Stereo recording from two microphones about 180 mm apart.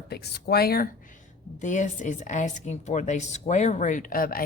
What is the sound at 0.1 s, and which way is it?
Speech, 65° left (ahead or behind).